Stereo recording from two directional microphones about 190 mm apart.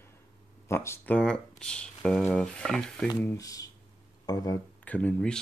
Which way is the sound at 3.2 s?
15° left (ahead or behind).